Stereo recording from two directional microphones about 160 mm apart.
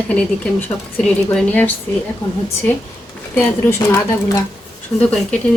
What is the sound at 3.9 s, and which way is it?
Speech, 20° left (ahead or behind).